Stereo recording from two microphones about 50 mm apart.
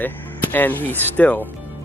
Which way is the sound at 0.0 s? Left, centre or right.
Left.